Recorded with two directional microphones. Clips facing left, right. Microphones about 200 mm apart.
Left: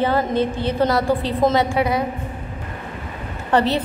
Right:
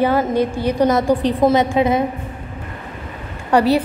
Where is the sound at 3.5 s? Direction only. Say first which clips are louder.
Right 4 dB; 10° right (ahead or behind).